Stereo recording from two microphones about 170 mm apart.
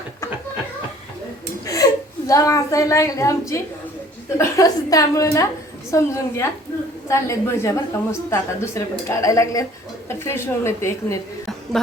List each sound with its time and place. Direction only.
1.6 s a woman's voice: 20° left (ahead or behind)